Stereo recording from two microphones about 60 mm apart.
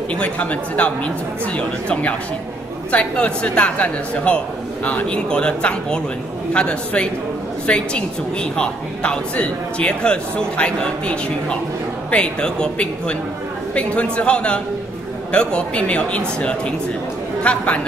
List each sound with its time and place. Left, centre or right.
0.1 s a woman's voice: left